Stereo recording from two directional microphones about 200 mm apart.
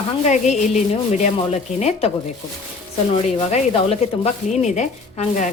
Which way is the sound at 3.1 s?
30° left (ahead or behind).